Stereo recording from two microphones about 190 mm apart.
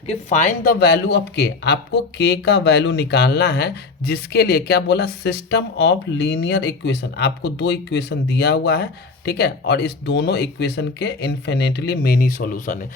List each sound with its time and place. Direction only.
0.1 s speech: 40° left (ahead or behind)